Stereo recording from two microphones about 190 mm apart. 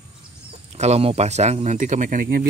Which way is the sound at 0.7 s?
35° right (ahead or behind).